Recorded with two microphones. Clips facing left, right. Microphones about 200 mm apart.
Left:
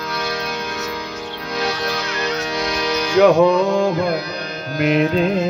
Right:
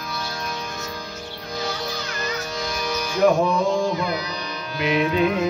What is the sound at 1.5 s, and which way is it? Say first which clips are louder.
Music: left 6 dB; 75° left (ahead or behind).